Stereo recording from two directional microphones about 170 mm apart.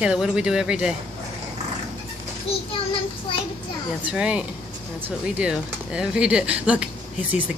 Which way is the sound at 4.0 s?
5° right (ahead or behind).